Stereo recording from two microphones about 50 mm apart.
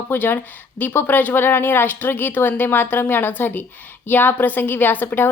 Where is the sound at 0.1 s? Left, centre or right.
Left.